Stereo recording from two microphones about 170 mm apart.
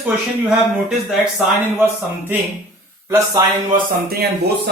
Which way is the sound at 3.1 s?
20° right (ahead or behind).